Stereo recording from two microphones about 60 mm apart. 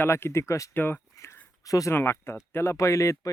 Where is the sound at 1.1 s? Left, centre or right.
Left.